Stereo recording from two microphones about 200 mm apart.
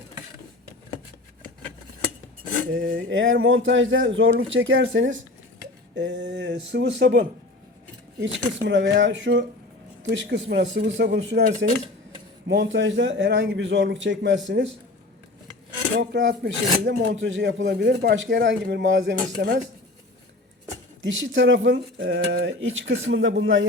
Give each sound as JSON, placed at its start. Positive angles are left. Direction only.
{"t": 2.9, "sound": "speech", "side_deg": -70}
{"t": 5.9, "sound": "speech", "side_deg": -60}
{"t": 16.0, "sound": "speech", "side_deg": -65}
{"t": 21.0, "sound": "speech", "side_deg": -70}